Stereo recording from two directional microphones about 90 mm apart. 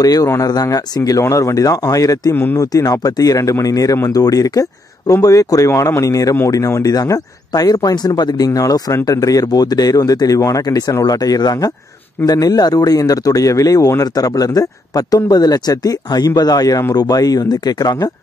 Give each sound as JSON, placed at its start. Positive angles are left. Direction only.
{"t": 0.0, "sound": "speech", "side_deg": 45}